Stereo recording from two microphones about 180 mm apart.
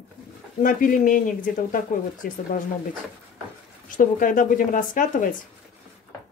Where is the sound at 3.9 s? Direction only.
50° left (ahead or behind).